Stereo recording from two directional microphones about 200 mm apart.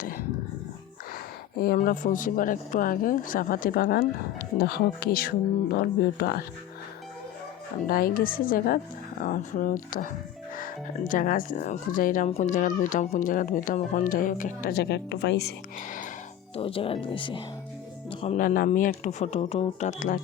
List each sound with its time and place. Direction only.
0.0 s a sound: 45° left (ahead or behind)
1.5 s speech: 50° left (ahead or behind)
7.9 s speech: 45° left (ahead or behind)
16.6 s speech: 25° left (ahead or behind)
18.1 s music: 25° left (ahead or behind)
18.3 s speech: 45° left (ahead or behind)